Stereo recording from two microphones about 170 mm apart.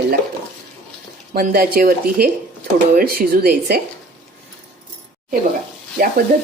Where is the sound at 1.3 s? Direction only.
60° right (ahead or behind).